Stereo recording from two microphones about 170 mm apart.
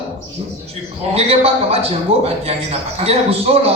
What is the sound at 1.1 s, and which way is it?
A man's voice, 35° right (ahead or behind).